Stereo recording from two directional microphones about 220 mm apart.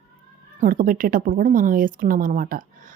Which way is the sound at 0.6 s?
40° right (ahead or behind).